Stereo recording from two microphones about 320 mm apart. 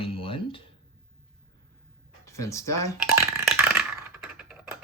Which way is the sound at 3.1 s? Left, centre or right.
Centre.